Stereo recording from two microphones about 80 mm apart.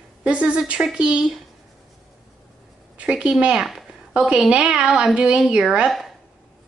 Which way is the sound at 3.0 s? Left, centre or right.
Centre.